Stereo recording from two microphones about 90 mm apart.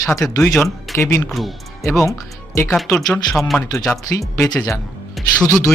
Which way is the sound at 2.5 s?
25° left (ahead or behind).